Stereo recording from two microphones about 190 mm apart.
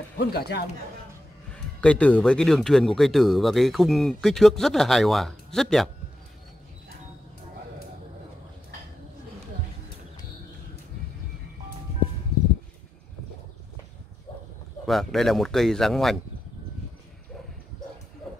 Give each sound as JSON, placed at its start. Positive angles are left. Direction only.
{"t": 0.2, "sound": "speech", "side_deg": 55}
{"t": 1.5, "sound": "speech", "side_deg": 5}
{"t": 14.9, "sound": "speech", "side_deg": 0}